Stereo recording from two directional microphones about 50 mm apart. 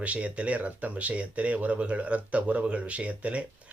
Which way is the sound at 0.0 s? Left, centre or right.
Right.